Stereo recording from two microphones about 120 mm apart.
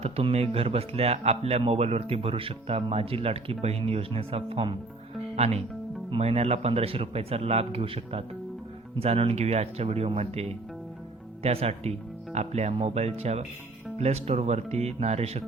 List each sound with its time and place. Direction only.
0.0 s speech: 55° right (ahead or behind)
5.4 s speech: 55° right (ahead or behind)